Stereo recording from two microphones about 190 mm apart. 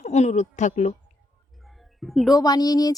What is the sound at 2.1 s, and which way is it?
Speech, centre (ahead or behind).